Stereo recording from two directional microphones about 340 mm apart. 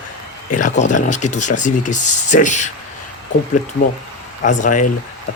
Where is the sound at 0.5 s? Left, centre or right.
Left.